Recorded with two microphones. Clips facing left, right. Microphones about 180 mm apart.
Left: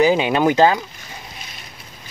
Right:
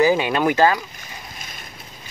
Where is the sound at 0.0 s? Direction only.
20° left (ahead or behind).